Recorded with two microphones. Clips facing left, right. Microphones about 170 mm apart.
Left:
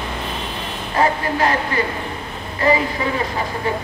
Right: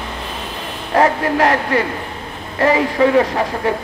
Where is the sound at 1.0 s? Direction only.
75° right (ahead or behind).